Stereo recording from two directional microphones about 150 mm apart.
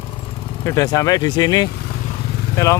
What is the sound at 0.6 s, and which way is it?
Speech, 20° left (ahead or behind).